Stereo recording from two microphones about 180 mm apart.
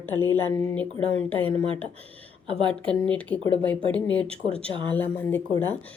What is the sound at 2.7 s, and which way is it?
A woman's voice, 5° left (ahead or behind).